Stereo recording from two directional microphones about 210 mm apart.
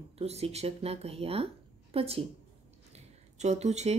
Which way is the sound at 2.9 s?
30° right (ahead or behind).